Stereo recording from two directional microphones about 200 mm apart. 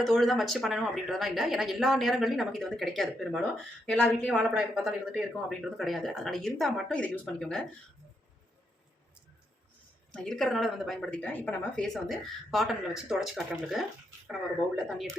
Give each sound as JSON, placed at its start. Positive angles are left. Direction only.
{"t": 0.0, "sound": "speech", "side_deg": 0}
{"t": 10.1, "sound": "speech", "side_deg": 0}
{"t": 14.8, "sound": "speech", "side_deg": 0}